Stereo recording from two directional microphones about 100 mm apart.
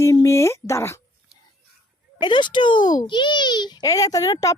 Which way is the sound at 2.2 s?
50° left (ahead or behind).